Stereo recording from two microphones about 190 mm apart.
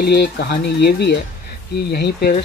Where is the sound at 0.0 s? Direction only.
60° left (ahead or behind).